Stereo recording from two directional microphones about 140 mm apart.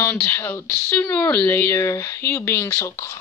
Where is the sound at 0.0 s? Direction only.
15° left (ahead or behind).